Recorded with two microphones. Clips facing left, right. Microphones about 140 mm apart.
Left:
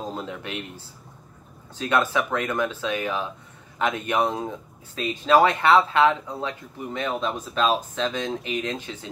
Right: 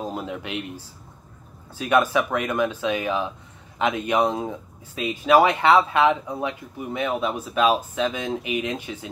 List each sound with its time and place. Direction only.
0.0 s speech: 15° right (ahead or behind)